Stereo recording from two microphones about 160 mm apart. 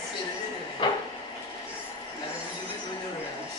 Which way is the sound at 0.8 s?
30° left (ahead or behind).